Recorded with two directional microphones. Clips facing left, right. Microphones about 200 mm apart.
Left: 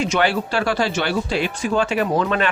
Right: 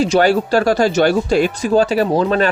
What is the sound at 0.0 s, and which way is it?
Speech, 40° right (ahead or behind).